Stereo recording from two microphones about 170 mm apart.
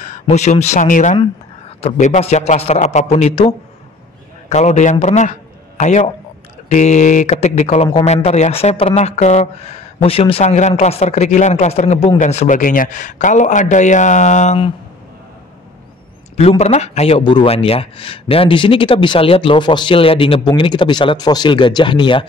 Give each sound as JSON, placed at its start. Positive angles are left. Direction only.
{"t": 0.0, "sound": "a man's voice", "side_deg": 45}
{"t": 4.5, "sound": "a man's voice", "side_deg": 40}
{"t": 16.3, "sound": "a man's voice", "side_deg": 40}